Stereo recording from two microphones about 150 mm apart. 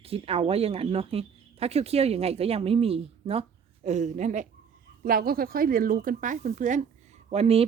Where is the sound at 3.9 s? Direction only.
50° right (ahead or behind).